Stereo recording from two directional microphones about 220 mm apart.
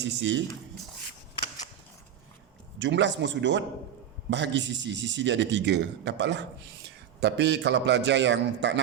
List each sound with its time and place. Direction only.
0.0 s a man's voice: 55° right (ahead or behind)
1.4 s a sound: 25° left (ahead or behind)
2.7 s a man's voice: 55° right (ahead or behind)